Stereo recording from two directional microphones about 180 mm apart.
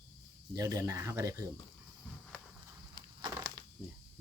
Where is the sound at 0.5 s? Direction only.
20° right (ahead or behind).